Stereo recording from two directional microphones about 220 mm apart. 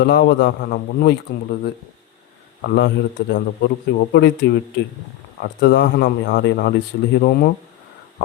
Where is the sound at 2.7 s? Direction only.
50° left (ahead or behind).